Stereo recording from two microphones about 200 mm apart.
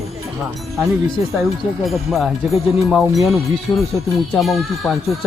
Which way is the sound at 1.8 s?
Centre (ahead or behind).